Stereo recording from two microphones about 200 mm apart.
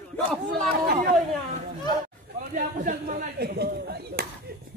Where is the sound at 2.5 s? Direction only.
40° right (ahead or behind).